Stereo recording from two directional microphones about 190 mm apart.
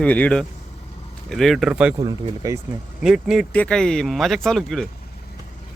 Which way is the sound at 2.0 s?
20° right (ahead or behind).